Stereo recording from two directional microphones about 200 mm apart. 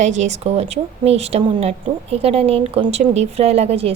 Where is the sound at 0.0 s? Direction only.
35° right (ahead or behind).